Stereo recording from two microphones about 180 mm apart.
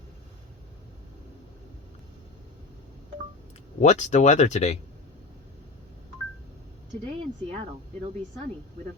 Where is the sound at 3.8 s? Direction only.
40° left (ahead or behind).